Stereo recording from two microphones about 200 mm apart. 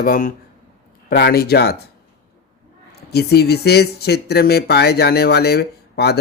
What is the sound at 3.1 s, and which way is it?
Speech, 55° left (ahead or behind).